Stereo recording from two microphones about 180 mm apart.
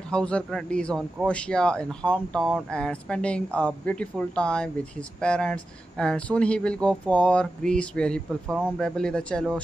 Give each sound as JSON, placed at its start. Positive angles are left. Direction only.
{"t": 0.1, "sound": "a man's voice", "side_deg": 5}